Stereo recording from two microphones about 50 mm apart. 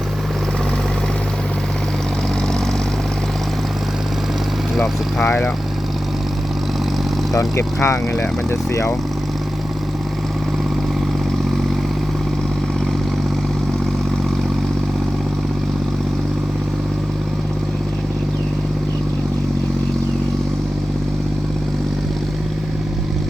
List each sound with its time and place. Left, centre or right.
7.3 s speech: left